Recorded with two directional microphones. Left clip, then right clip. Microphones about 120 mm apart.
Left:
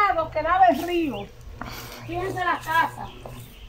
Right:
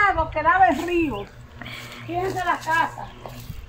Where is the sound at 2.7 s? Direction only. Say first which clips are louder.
Right 1 dB; 15° left (ahead or behind).